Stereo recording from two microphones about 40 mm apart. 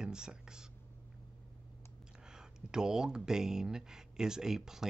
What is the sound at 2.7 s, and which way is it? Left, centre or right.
Speech, centre.